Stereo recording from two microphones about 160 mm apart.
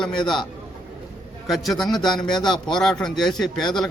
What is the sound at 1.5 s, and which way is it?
A man's voice, centre (ahead or behind).